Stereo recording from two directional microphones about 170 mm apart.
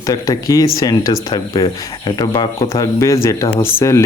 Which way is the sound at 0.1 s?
20° left (ahead or behind).